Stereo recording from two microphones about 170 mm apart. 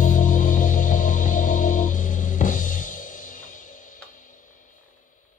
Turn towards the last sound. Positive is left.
turn(degrees=50)  # may be behind; listen again after turning